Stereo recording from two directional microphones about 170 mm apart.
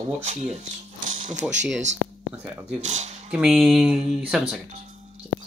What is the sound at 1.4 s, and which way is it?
Speech, centre (ahead or behind).